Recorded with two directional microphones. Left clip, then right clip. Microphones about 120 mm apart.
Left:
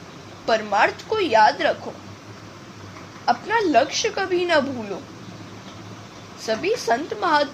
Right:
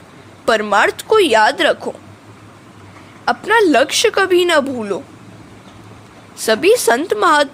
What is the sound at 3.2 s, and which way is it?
A woman's voice, 90° right.